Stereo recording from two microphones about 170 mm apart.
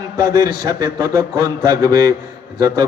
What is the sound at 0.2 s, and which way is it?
A man's voice, 20° right (ahead or behind).